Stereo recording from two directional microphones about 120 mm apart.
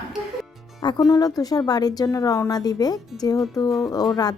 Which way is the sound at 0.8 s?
35° left (ahead or behind).